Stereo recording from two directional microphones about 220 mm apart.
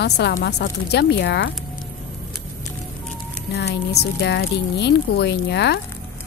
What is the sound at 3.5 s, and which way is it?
Speech, 50° left (ahead or behind).